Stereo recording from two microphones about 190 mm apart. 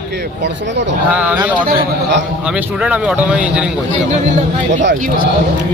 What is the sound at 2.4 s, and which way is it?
Speech, 5° right (ahead or behind).